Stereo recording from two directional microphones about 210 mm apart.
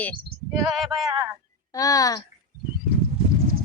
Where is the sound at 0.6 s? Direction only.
Centre (ahead or behind).